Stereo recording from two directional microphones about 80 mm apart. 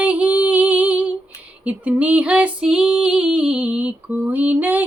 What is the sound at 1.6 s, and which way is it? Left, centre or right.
Female singing, centre.